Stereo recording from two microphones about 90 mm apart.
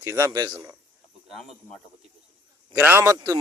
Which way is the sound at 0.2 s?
45° right (ahead or behind).